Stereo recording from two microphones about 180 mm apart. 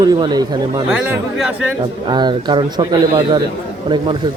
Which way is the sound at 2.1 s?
25° right (ahead or behind).